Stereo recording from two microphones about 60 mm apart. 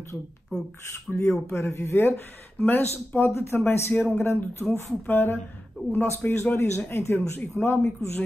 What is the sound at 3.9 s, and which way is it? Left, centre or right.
Speech, centre.